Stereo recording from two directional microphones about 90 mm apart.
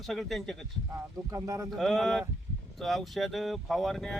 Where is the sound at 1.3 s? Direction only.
40° right (ahead or behind).